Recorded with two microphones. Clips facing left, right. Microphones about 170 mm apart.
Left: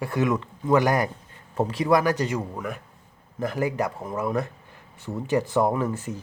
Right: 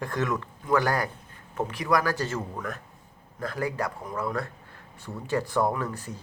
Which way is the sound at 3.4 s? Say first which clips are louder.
Left 4 dB; 20° left (ahead or behind).